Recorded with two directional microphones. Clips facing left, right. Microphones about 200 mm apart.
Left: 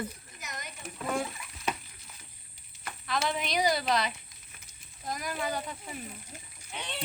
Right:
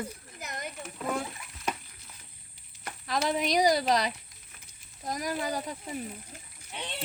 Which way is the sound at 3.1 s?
35° right (ahead or behind).